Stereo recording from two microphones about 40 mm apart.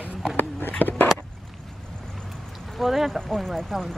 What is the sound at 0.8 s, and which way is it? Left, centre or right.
Speech, left.